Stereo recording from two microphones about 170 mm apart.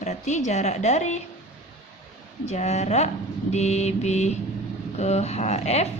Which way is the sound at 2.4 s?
40° left (ahead or behind).